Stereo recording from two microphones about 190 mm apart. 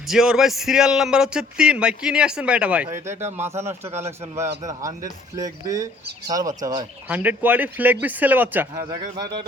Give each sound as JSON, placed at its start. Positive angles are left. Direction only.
{"t": 0.1, "sound": "a man's voice", "side_deg": 0}
{"t": 7.1, "sound": "speech", "side_deg": -10}